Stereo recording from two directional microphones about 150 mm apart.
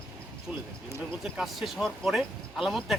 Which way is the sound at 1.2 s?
Centre (ahead or behind).